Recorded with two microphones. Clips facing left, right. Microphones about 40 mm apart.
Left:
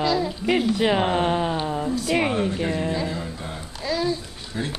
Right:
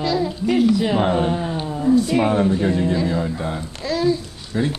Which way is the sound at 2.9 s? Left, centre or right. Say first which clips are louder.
Right 6 dB; centre.